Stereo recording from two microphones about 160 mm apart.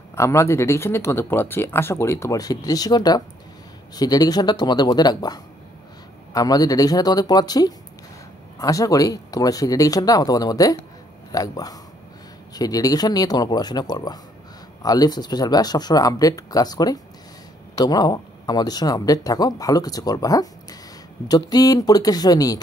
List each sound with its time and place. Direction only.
0.1 s speech: 15° left (ahead or behind)